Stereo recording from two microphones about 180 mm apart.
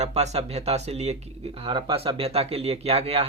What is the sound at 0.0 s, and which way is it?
Speech, 40° right (ahead or behind).